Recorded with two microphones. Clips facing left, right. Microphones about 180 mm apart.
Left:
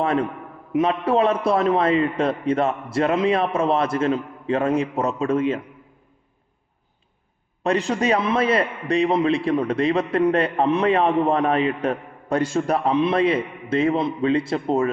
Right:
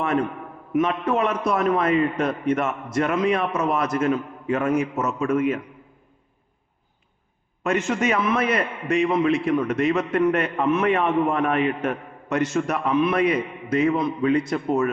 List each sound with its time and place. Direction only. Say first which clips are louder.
0.0 s a man's voice: left 1 dB; 30° left (ahead or behind)
7.6 s a man's voice: left 1 dB; 35° left (ahead or behind)